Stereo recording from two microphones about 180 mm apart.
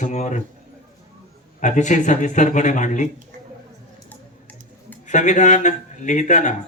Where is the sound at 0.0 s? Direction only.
40° left (ahead or behind).